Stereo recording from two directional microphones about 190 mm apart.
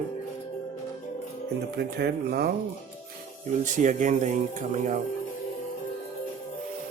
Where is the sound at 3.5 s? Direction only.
40° right (ahead or behind).